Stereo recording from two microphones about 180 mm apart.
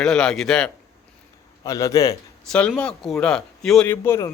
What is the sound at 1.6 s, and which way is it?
Speech, 20° left (ahead or behind).